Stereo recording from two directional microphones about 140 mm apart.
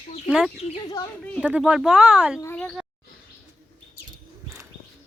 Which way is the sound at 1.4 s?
5° right (ahead or behind).